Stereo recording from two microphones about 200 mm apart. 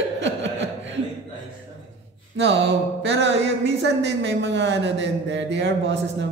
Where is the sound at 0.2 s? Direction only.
65° right (ahead or behind).